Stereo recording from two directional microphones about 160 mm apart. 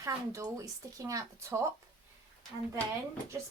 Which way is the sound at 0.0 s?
20° right (ahead or behind).